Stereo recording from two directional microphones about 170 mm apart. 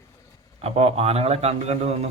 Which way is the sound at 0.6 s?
35° right (ahead or behind).